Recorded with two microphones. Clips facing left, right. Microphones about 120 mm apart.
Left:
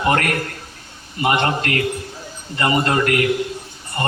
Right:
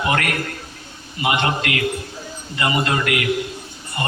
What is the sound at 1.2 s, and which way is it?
A man's voice, 40° left (ahead or behind).